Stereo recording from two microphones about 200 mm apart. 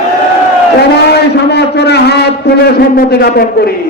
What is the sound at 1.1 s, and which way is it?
A man's voice, 55° left (ahead or behind).